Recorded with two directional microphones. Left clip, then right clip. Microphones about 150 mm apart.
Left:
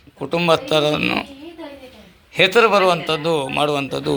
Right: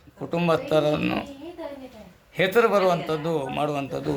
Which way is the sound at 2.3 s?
15° left (ahead or behind).